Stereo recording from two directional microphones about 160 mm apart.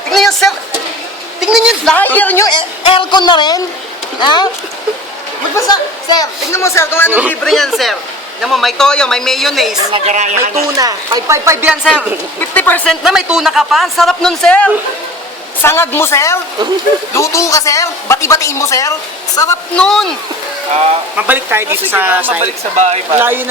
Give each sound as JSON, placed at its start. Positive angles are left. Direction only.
{"t": 0.1, "sound": "a sound", "side_deg": 0}
{"t": 2.5, "sound": "speech", "side_deg": 30}
{"t": 5.5, "sound": "speech", "side_deg": 25}
{"t": 7.1, "sound": "speech", "side_deg": -10}
{"t": 7.4, "sound": "speech", "side_deg": 0}
{"t": 9.9, "sound": "a woman's voice", "side_deg": -45}
{"t": 10.8, "sound": "speech", "side_deg": -20}
{"t": 12.4, "sound": "speech", "side_deg": 10}
{"t": 19.7, "sound": "speech", "side_deg": 5}
{"t": 21.2, "sound": "speech", "side_deg": -10}
{"t": 22.7, "sound": "a woman's voice", "side_deg": -45}
{"t": 23.1, "sound": "speech", "side_deg": -15}